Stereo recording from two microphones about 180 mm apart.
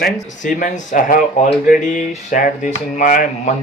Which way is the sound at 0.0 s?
45° left (ahead or behind).